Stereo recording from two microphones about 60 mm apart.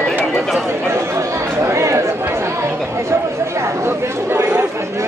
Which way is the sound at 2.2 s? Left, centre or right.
Right.